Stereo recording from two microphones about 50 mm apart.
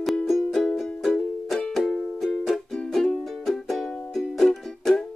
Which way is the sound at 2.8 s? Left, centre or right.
Centre.